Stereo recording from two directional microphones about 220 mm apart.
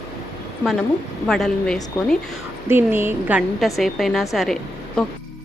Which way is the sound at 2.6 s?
10° right (ahead or behind).